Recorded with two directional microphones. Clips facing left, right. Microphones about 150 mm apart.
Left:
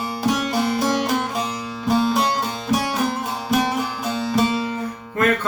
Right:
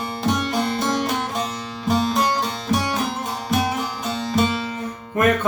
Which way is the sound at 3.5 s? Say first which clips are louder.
Left 2 dB; centre (ahead or behind).